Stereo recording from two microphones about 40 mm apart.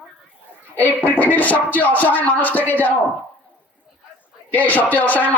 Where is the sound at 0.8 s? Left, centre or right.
Left.